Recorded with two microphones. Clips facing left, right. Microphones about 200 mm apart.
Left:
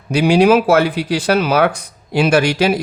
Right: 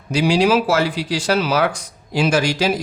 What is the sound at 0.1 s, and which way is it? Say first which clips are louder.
Speech: left 4 dB; 60° left (ahead or behind).